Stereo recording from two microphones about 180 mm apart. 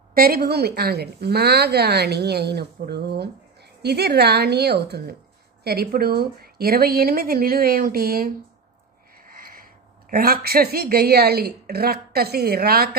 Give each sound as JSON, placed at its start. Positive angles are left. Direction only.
{"t": 0.1, "sound": "a woman's voice", "side_deg": -55}